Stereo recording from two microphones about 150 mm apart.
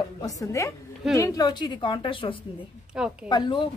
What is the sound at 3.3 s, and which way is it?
Speech, 30° left (ahead or behind).